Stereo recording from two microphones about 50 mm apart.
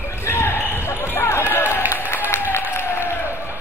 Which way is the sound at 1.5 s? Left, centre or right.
Left.